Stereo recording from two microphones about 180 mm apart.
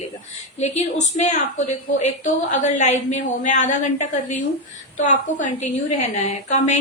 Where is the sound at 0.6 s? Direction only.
40° left (ahead or behind).